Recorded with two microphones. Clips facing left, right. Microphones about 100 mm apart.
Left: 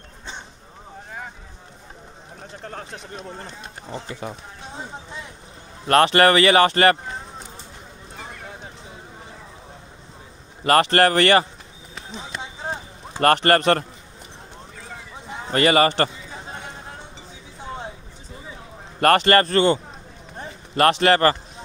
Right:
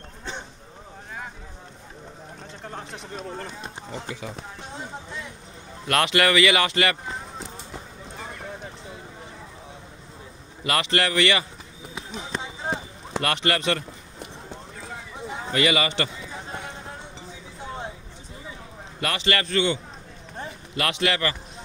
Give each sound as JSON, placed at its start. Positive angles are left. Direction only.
{"t": 3.9, "sound": "speech", "side_deg": 40}
{"t": 5.9, "sound": "speech", "side_deg": 35}
{"t": 10.6, "sound": "speech", "side_deg": 45}
{"t": 13.2, "sound": "speech", "side_deg": 45}
{"t": 15.5, "sound": "speech", "side_deg": 45}
{"t": 18.9, "sound": "speech", "side_deg": 50}